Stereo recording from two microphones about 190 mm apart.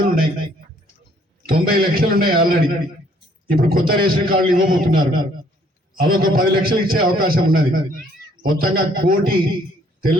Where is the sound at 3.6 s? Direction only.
50° right (ahead or behind).